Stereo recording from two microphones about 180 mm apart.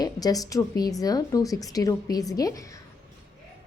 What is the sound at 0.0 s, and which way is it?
A woman's voice, 20° left (ahead or behind).